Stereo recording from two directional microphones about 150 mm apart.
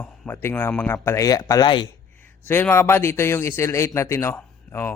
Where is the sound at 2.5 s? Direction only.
15° left (ahead or behind).